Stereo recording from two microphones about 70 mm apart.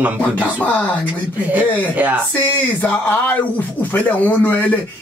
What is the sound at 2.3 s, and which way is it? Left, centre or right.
Speech, left.